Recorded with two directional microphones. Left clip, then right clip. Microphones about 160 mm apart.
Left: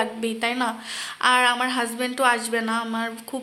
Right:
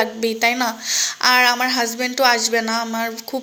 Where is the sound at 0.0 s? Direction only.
20° right (ahead or behind).